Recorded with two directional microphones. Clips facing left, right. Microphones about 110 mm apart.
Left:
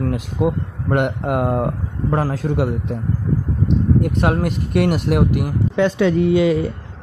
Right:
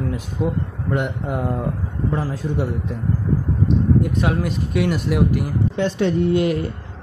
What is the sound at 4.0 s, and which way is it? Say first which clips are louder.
Speech: left 2 dB; 60° left (ahead or behind).